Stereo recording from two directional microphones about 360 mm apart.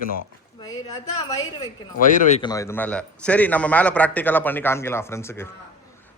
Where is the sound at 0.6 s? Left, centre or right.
Centre.